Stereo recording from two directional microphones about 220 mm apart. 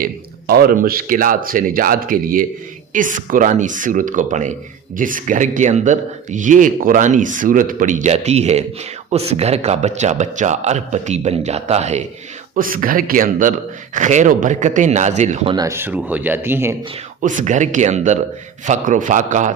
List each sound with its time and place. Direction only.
0.0 s a man's voice: 40° right (ahead or behind)
15.5 s speech: 15° right (ahead or behind)
17.2 s a man's voice: 35° right (ahead or behind)